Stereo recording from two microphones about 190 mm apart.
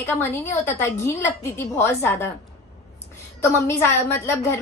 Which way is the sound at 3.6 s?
15° left (ahead or behind).